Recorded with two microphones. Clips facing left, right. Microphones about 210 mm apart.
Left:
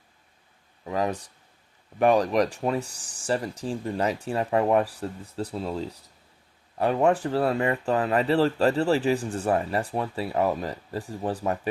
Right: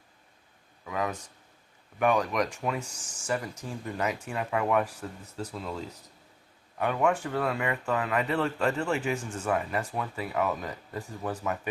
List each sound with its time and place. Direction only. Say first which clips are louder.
0.9 s speech: left 5 dB; 35° left (ahead or behind)